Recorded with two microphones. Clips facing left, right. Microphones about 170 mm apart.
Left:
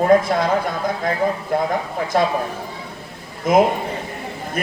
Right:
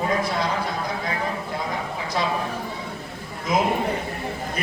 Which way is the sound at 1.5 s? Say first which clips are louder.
Left 8 dB; 55° left (ahead or behind).